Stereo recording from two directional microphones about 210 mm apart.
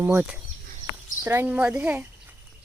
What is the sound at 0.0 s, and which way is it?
Speech, 10° right (ahead or behind).